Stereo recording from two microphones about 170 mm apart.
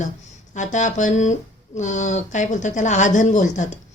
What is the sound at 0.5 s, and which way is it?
A woman's voice, 45° left (ahead or behind).